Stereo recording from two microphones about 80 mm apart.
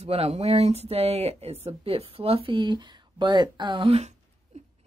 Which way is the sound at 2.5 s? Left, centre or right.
Right.